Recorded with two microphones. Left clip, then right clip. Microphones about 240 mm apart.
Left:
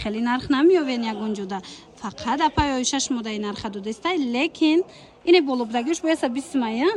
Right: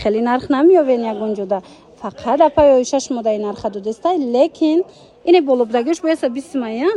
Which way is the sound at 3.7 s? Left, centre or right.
Centre.